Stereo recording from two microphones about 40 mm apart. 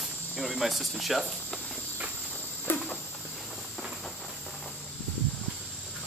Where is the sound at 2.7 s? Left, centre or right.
Left.